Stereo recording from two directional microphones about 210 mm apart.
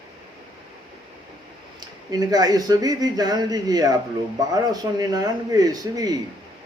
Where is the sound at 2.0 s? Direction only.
20° right (ahead or behind).